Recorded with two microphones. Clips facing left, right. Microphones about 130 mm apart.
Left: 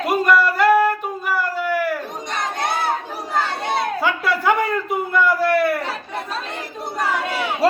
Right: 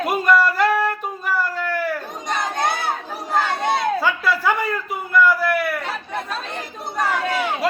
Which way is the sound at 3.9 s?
20° left (ahead or behind).